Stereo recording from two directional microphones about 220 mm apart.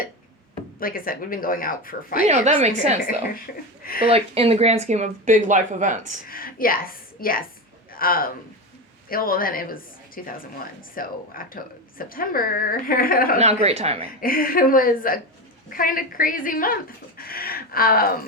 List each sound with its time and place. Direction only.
0.8 s a woman's voice: 40° left (ahead or behind)
2.2 s speech: 30° right (ahead or behind)
4.1 s speech: 25° right (ahead or behind)
6.2 s a woman's voice: 40° left (ahead or behind)
13.4 s a woman's voice: 30° right (ahead or behind)
14.2 s a woman's voice: 40° left (ahead or behind)